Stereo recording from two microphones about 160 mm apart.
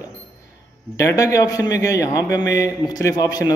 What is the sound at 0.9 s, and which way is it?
A man's voice, 20° left (ahead or behind).